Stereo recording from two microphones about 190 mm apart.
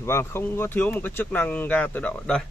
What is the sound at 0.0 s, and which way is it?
Speech, 15° left (ahead or behind).